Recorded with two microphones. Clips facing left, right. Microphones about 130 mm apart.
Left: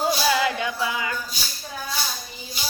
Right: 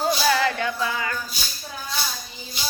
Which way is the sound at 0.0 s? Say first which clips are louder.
Even; 15° left (ahead or behind).